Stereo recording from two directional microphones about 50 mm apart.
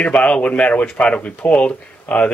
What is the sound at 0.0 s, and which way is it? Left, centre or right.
Speech, left.